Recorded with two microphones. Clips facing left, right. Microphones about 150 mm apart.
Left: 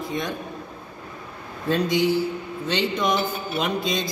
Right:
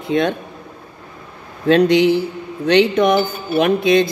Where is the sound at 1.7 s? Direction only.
70° right (ahead or behind).